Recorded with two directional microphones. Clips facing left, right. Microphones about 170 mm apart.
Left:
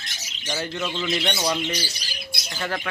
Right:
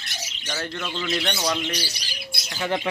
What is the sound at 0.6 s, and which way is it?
Speech, 5° left (ahead or behind).